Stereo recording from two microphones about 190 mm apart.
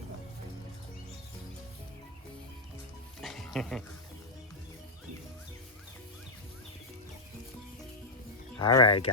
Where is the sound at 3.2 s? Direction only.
Centre (ahead or behind).